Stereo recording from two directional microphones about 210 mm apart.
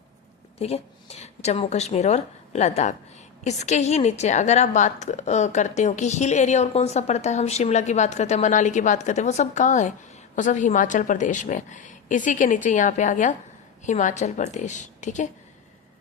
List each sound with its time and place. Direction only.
0.6 s a woman's voice: 30° left (ahead or behind)